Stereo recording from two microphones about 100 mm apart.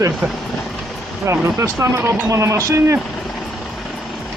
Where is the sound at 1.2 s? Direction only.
30° right (ahead or behind).